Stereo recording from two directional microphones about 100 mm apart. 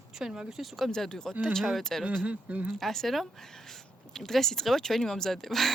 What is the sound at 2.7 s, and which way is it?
Speech, 5° left (ahead or behind).